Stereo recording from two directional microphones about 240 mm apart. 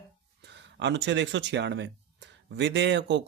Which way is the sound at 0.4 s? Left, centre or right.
Right.